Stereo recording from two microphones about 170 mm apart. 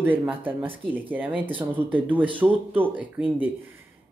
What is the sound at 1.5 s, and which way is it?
Speech, 30° right (ahead or behind).